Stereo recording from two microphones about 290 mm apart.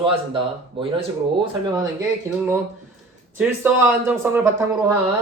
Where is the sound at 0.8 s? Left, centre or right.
Centre.